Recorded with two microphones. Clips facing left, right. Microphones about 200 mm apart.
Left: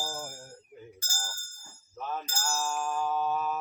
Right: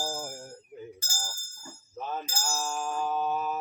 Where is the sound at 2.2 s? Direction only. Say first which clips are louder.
Even; 15° right (ahead or behind).